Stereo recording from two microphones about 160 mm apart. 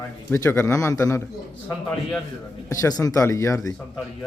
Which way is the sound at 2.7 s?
20° left (ahead or behind).